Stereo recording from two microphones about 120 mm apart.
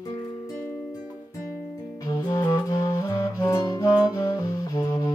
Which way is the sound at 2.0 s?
30° left (ahead or behind).